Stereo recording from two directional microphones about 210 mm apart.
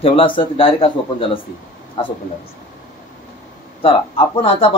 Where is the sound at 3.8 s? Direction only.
25° left (ahead or behind).